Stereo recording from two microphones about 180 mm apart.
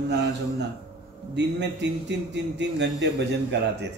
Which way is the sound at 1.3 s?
75° right (ahead or behind).